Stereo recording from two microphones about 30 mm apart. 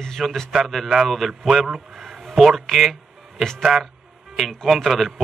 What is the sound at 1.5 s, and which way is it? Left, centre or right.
Speech, centre.